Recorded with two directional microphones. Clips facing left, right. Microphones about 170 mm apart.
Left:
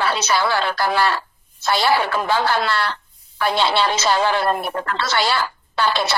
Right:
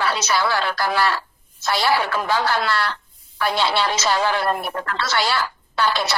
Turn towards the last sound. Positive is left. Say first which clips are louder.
# left 1 dB
turn(degrees=25)  # may be behind; listen again after turning